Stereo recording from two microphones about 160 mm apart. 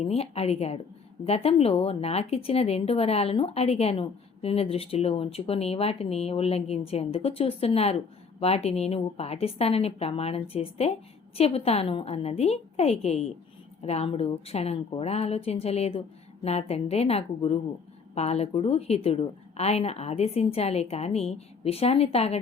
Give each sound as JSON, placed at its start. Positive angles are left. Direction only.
{"t": 0.0, "sound": "speech", "side_deg": 40}